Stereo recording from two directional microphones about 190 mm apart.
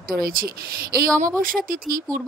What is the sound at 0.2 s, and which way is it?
Speech, 50° right (ahead or behind).